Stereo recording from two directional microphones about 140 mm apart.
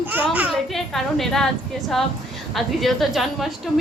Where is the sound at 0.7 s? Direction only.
Centre (ahead or behind).